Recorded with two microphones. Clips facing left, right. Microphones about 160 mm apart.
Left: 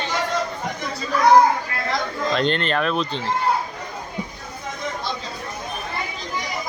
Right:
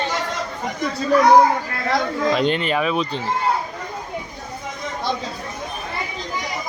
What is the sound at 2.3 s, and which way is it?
Speech, 10° right (ahead or behind).